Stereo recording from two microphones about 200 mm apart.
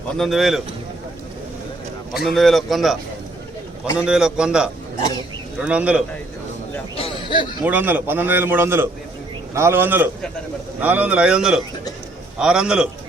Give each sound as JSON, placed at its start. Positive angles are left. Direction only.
{"t": 0.2, "sound": "a man's voice", "side_deg": 0}
{"t": 2.2, "sound": "a man's voice", "side_deg": 0}
{"t": 6.9, "sound": "a sound", "side_deg": 25}
{"t": 7.6, "sound": "a man's voice", "side_deg": -10}